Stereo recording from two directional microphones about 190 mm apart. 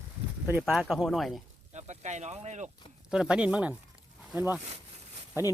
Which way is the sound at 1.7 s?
35° right (ahead or behind).